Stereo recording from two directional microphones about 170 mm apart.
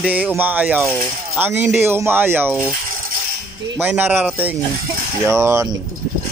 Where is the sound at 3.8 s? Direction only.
10° right (ahead or behind).